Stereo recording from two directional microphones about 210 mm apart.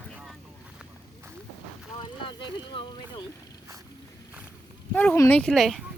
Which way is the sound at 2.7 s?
25° left (ahead or behind).